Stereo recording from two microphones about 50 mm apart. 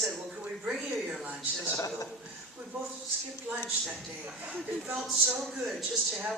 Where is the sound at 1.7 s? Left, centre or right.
Left.